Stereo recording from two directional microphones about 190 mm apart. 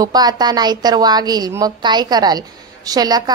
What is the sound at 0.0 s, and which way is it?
A woman's voice, 20° right (ahead or behind).